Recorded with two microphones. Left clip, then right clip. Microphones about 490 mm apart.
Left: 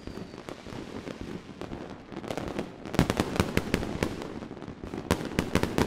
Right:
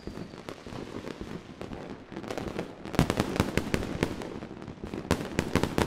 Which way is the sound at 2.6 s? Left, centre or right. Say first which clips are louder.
Even; left.